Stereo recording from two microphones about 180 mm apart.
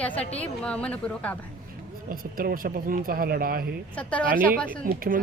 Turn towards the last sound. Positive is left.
turn(degrees=-50)  # may be behind; listen again after turning